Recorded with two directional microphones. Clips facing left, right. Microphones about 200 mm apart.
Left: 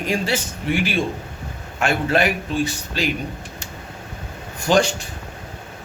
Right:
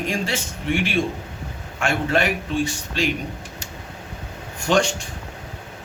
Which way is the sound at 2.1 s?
5° left (ahead or behind).